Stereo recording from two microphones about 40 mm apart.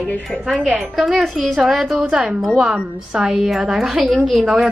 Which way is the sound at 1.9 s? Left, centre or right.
Centre.